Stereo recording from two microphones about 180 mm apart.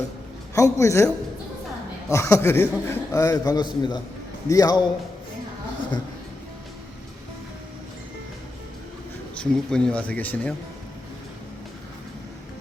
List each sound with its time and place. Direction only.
0.5 s a man's voice: 15° left (ahead or behind)
9.3 s speech: 5° left (ahead or behind)